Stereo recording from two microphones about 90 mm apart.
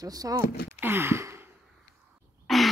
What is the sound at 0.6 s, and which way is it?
Gasp, 25° right (ahead or behind).